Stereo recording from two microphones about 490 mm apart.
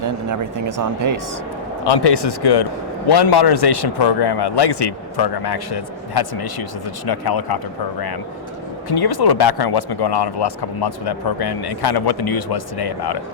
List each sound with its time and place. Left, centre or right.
0.0 s speech: right
1.8 s a man's voice: left